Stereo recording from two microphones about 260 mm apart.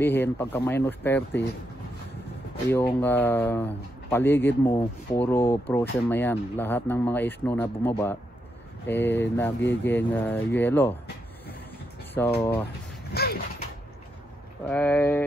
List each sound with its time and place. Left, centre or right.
0.0 s speech: centre
2.7 s speech: centre
12.2 s speech: centre
13.1 s a sound: left
14.6 s speech: centre